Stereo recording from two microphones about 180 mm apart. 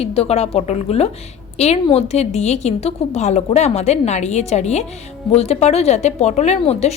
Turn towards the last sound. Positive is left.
turn(degrees=35)  # may be behind; listen again after turning